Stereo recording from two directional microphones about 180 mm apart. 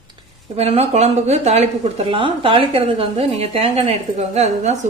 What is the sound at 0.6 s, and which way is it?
A woman's voice, 35° right (ahead or behind).